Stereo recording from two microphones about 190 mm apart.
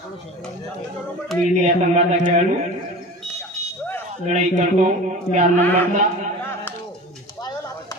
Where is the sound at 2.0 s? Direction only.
40° right (ahead or behind).